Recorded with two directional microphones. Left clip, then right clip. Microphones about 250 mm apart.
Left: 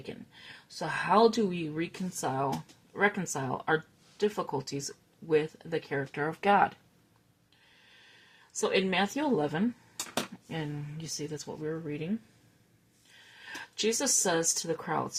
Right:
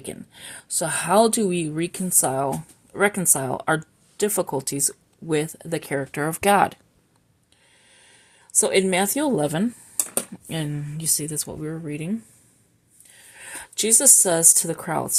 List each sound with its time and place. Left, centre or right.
0.0 s speech: right
8.5 s speech: right
13.4 s speech: right